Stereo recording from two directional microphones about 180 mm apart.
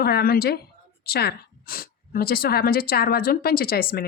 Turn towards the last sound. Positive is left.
turn(degrees=55)  # may be behind; listen again after turning